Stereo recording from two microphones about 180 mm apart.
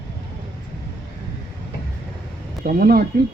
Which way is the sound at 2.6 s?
55° right (ahead or behind).